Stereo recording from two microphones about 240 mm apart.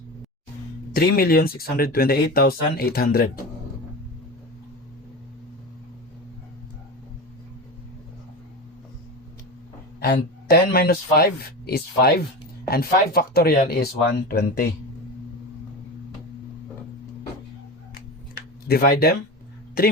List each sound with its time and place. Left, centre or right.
0.9 s speech: left
10.0 s speech: left
18.3 s a sound: left
19.8 s speech: left